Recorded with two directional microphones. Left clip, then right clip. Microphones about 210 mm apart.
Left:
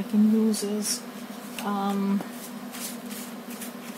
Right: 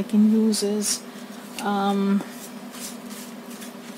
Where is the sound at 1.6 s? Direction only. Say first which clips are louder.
Right 5 dB; 55° right (ahead or behind).